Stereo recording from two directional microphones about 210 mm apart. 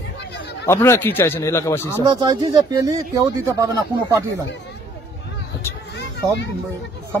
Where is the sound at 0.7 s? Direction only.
15° left (ahead or behind).